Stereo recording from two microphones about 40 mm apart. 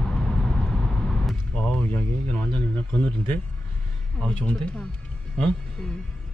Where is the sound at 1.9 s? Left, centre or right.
Left.